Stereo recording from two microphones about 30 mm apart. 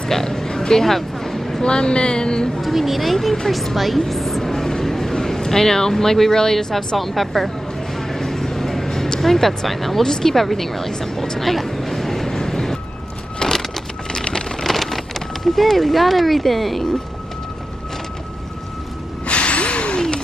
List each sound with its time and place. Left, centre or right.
0.1 s a sound: centre
1.6 s speech: left
2.6 s speech: centre
4.1 s vehicle: centre
7.0 s speech: centre
8.1 s a sound: centre
9.7 s speech: centre
10.0 s speech: centre
11.3 s vehicle: centre
13.4 s vehicle: left
14.6 s a sound: centre
19.2 s gasp: left